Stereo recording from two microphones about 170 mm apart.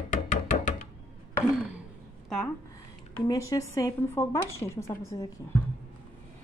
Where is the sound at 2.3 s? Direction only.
5° left (ahead or behind).